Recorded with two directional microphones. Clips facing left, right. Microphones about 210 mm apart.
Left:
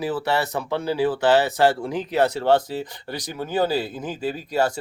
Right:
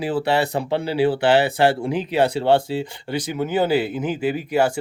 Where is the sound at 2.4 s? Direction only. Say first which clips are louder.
Right 2 dB; 25° right (ahead or behind).